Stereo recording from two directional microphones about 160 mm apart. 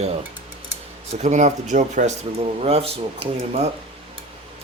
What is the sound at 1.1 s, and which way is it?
Speech, 45° right (ahead or behind).